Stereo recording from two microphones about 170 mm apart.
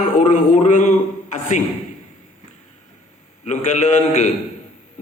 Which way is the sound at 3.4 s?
40° left (ahead or behind).